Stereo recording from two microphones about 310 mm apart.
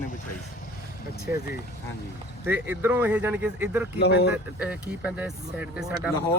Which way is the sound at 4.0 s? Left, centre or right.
Left.